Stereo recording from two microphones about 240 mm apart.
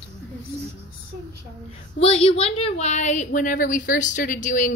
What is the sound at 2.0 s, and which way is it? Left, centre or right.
Speech, left.